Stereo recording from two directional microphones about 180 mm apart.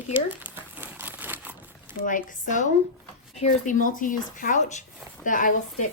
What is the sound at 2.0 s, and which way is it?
A woman's voice, 50° left (ahead or behind).